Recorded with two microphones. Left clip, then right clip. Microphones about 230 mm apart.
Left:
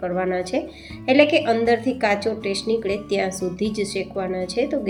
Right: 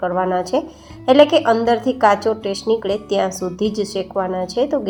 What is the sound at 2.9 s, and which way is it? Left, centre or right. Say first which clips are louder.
Speech: right 4 dB; centre.